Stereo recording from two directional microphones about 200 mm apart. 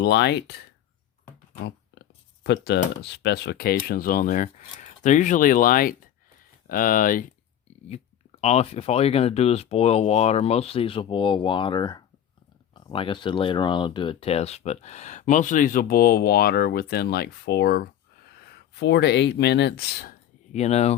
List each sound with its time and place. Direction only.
0.0 s speech: 60° left (ahead or behind)
1.6 s a sound: 60° left (ahead or behind)
3.1 s speech: 60° left (ahead or behind); by 7.3 s 45° left (ahead or behind)
7.9 s speech: 30° left (ahead or behind); by 20.1 s 55° left (ahead or behind)
20.5 s speech: 35° left (ahead or behind)